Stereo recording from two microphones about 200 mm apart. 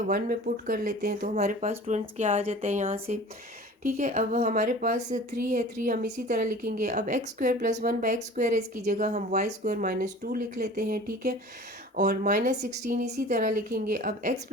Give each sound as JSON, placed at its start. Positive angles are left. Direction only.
{"t": 0.1, "sound": "a woman's voice", "side_deg": -45}